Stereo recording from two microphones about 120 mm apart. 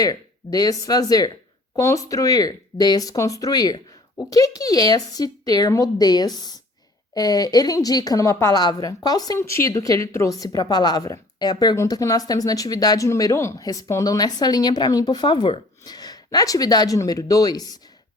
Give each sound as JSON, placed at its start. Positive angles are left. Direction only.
{"t": 0.0, "sound": "speech", "side_deg": 30}